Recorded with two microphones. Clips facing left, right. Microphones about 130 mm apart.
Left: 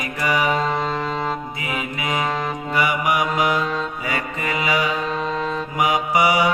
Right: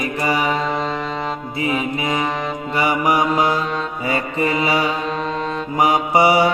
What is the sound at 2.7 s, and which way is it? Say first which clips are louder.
Mantra: right 3 dB; 30° right (ahead or behind).